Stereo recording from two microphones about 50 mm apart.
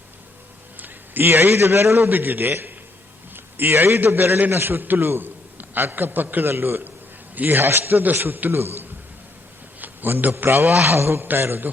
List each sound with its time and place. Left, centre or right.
0.8 s a man's voice: right
2.0 s a man's voice: right